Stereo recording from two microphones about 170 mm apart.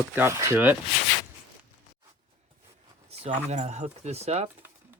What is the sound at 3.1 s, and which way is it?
Speech, 35° right (ahead or behind).